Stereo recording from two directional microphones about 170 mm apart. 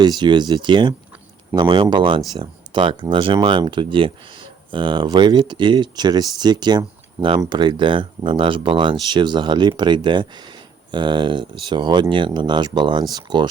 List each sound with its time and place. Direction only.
0.0 s speech: 25° right (ahead or behind)